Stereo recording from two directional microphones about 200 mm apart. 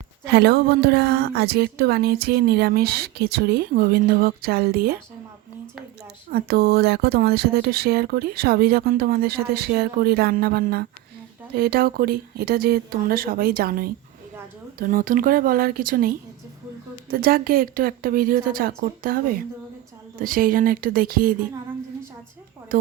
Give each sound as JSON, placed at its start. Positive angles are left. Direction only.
{"t": 0.3, "sound": "a woman's voice", "side_deg": -55}
{"t": 6.3, "sound": "a woman's voice", "side_deg": -50}